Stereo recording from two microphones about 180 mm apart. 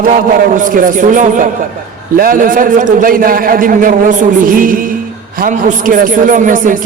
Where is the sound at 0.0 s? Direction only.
50° right (ahead or behind).